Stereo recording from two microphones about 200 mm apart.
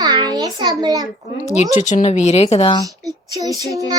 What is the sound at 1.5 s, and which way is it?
Speech, 35° left (ahead or behind).